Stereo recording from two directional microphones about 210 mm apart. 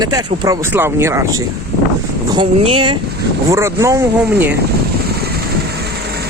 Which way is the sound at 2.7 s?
25° right (ahead or behind).